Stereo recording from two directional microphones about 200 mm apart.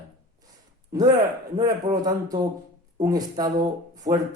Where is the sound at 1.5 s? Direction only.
20° right (ahead or behind).